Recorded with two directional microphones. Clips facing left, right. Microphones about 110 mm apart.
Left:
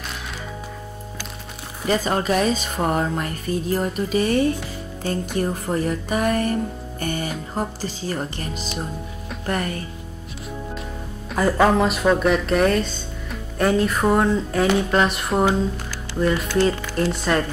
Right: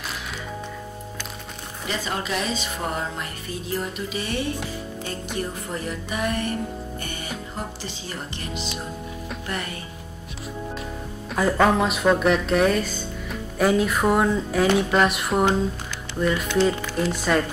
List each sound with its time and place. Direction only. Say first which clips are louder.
1.9 s speech: left 8 dB; 45° left (ahead or behind)
5.7 s speech: left 7 dB; 45° left (ahead or behind)
7.0 s music: left 8 dB; 45° left (ahead or behind)
7.5 s speech: left 6 dB; 40° left (ahead or behind)
11.2 s speech: left 2 dB; centre (ahead or behind)